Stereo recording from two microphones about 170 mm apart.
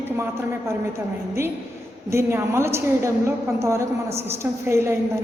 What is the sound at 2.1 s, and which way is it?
A woman's voice, 15° right (ahead or behind).